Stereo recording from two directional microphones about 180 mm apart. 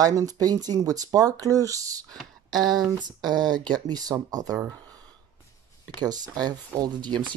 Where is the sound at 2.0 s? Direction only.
Centre (ahead or behind).